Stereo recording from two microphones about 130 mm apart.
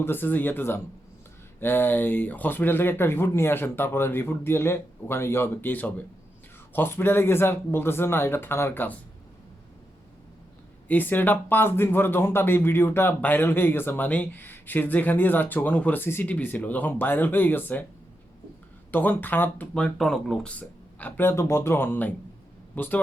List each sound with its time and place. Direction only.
0.0 s speech: 15° left (ahead or behind)
10.8 s speech: 15° left (ahead or behind)
18.9 s speech: 15° left (ahead or behind)